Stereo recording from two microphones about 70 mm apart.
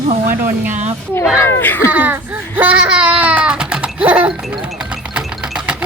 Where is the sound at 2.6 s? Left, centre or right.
Right.